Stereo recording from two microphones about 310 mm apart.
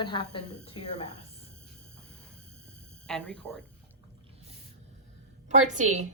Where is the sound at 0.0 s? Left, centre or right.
Centre.